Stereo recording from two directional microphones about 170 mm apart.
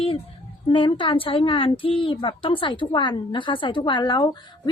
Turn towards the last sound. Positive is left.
turn(degrees=25)  # may be behind; listen again after turning